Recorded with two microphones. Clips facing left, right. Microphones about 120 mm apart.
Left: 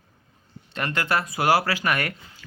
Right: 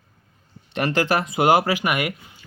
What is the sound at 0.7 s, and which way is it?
Speech, 25° right (ahead or behind).